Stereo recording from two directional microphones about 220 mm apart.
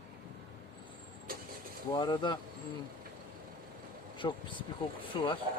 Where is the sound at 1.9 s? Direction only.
20° left (ahead or behind).